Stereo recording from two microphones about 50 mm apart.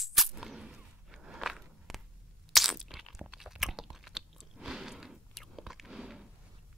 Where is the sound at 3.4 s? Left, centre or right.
Centre.